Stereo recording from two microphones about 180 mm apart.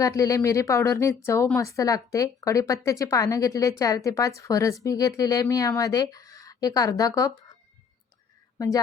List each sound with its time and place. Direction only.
0.2 s speech: 15° left (ahead or behind)
8.5 s a woman's voice: 20° left (ahead or behind)